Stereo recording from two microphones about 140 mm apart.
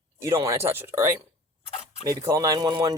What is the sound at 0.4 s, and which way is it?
Speech, 20° right (ahead or behind).